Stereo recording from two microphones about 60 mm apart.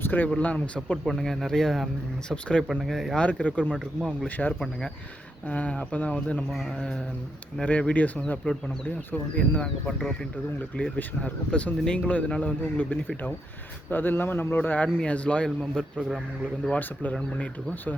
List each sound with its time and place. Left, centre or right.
0.0 s a sound: left
0.3 s speech: left
1.0 s speech: centre
2.6 s speech: centre
3.2 s speech: centre
5.5 s speech: left
7.6 s a man's voice: left
9.6 s speech: centre
13.9 s a man's voice: left
15.0 s speech: centre
16.0 s a man's voice: centre
16.6 s speech: left